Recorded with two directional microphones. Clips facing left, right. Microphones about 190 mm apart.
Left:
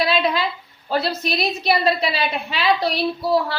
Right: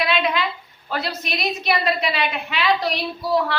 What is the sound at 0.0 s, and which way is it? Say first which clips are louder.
A woman's voice: left 2 dB; 35° left (ahead or behind).